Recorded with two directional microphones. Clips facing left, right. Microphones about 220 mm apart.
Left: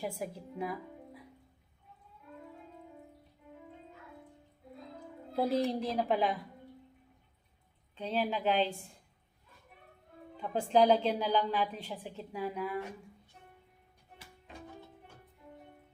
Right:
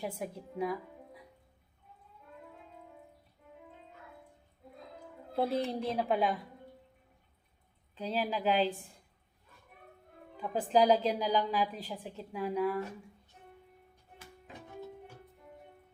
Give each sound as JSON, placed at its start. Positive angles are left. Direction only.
{"t": 0.0, "sound": "a woman's voice", "side_deg": 0}
{"t": 5.4, "sound": "a woman's voice", "side_deg": 0}
{"t": 7.9, "sound": "a woman's voice", "side_deg": -5}
{"t": 10.4, "sound": "a woman's voice", "side_deg": -5}